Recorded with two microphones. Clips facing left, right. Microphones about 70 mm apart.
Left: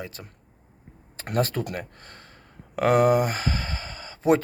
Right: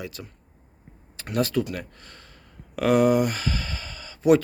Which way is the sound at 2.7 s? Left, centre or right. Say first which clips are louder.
Even; left.